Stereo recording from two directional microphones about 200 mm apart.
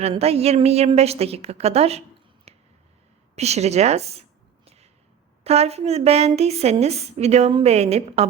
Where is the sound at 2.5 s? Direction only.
30° right (ahead or behind).